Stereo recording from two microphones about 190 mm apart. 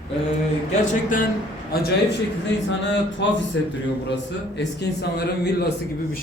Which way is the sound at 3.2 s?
70° left (ahead or behind).